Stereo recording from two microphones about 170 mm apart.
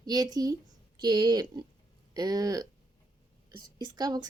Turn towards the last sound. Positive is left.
turn(degrees=-25)  # may be behind; listen again after turning